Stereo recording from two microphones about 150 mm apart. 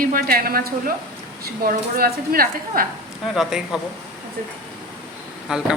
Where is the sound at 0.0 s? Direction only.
75° right (ahead or behind).